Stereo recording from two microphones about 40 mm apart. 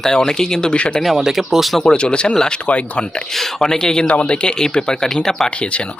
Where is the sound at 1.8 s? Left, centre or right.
Left.